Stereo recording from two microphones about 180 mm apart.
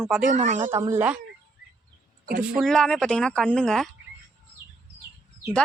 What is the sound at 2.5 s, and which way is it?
Speech, centre (ahead or behind).